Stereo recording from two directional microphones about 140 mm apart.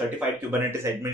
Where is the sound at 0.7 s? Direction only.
20° right (ahead or behind).